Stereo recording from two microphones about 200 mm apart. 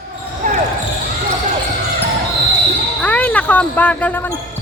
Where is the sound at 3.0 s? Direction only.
5° left (ahead or behind).